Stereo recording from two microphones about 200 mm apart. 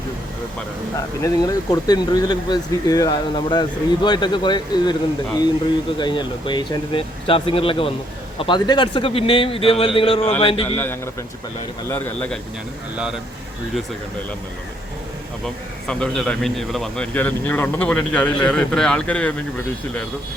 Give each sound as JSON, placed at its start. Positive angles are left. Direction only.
{"t": 0.9, "sound": "speech", "side_deg": 15}
{"t": 10.8, "sound": "a man's voice", "side_deg": 10}
{"t": 15.9, "sound": "a man's voice", "side_deg": 5}